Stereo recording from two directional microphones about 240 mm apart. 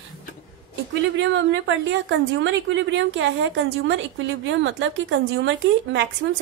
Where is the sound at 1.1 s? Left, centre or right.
Right.